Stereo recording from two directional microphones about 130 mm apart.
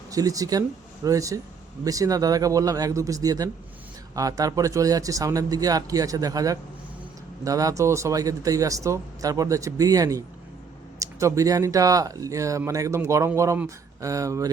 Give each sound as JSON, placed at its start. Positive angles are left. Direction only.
{"t": 0.1, "sound": "speech", "side_deg": -25}